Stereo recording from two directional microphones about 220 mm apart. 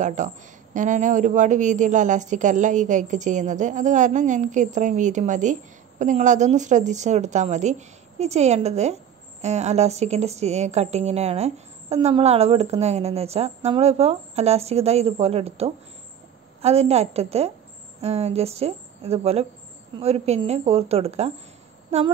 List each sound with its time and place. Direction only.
0.0 s a woman's voice: 35° right (ahead or behind)